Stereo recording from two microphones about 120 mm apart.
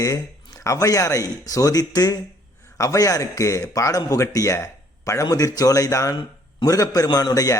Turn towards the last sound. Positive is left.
turn(degrees=30)  # may be behind; listen again after turning